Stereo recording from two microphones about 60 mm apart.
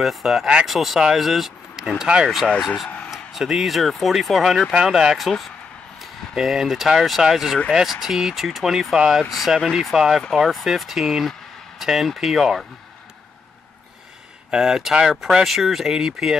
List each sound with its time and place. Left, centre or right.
0.0 s speech: centre
14.5 s speech: centre